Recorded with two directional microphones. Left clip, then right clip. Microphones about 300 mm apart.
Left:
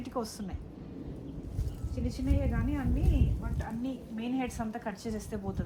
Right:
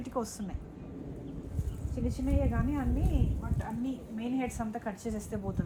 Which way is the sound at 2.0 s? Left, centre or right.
Centre.